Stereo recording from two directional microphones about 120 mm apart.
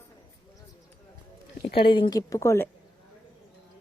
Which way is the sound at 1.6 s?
45° left (ahead or behind).